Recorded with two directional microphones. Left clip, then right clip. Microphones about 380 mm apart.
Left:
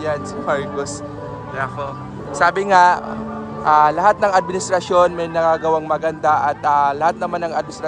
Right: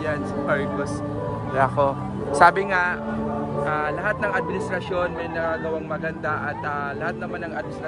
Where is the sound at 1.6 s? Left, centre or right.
Centre.